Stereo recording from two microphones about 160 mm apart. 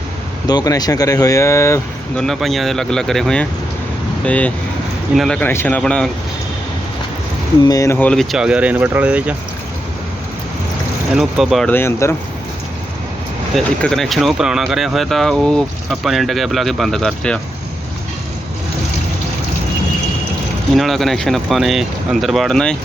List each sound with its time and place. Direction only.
0.4 s speech: 25° left (ahead or behind)
2.1 s speech: centre (ahead or behind)
7.7 s speech: 20° left (ahead or behind); by 9.3 s 10° right (ahead or behind)
11.1 s speech: 5° right (ahead or behind)
11.7 s speech: 15° left (ahead or behind)
13.6 s speech: centre (ahead or behind)
20.7 s speech: centre (ahead or behind)